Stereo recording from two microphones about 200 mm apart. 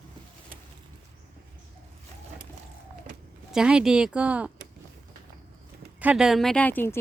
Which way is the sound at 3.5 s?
5° right (ahead or behind).